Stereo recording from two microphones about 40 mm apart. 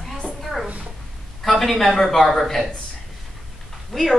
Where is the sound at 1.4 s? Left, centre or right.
Centre.